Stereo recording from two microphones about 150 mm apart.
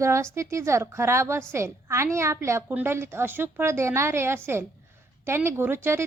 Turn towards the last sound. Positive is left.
turn(degrees=-15)  # may be behind; listen again after turning